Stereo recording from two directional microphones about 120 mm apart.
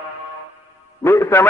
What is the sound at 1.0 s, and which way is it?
Speech, 25° left (ahead or behind).